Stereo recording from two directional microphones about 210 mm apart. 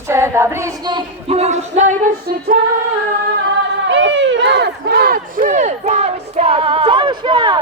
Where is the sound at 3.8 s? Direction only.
60° right (ahead or behind); by 7.6 s 25° right (ahead or behind).